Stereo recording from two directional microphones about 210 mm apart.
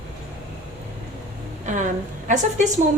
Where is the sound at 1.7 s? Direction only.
35° right (ahead or behind).